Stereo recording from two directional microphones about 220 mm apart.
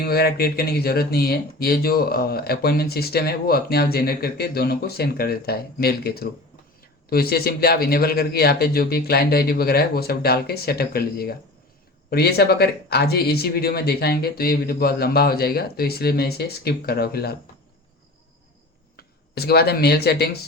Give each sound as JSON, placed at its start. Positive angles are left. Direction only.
{"t": 0.0, "sound": "speech", "side_deg": 45}
{"t": 18.9, "sound": "speech", "side_deg": 45}